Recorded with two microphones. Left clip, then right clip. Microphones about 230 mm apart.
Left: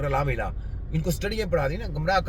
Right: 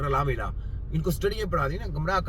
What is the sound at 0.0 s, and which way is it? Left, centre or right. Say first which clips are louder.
A man's voice: left 1 dB; centre.